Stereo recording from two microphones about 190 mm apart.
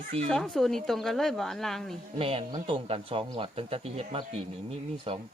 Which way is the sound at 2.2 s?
30° right (ahead or behind).